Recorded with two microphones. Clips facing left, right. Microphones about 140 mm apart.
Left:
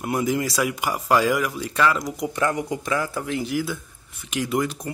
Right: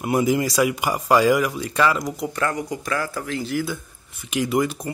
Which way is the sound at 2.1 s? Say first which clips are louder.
Left 1 dB; 15° left (ahead or behind).